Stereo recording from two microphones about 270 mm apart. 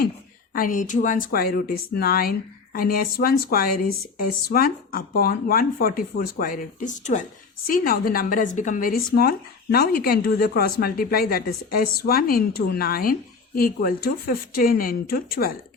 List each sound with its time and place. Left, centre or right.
0.5 s speech: left